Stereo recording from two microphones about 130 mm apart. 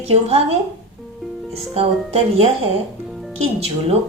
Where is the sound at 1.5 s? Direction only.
50° right (ahead or behind).